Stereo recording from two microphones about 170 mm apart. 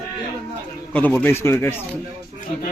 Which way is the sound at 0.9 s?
10° left (ahead or behind).